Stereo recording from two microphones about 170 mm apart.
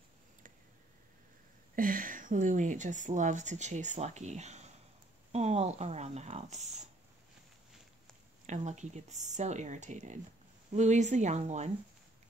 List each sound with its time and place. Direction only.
1.8 s a woman's voice: 55° right (ahead or behind)
8.5 s a woman's voice: 45° right (ahead or behind)